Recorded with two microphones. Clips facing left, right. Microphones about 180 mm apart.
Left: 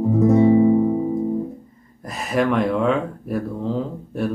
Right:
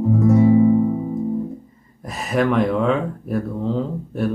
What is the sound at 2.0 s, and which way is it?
Speech, centre (ahead or behind).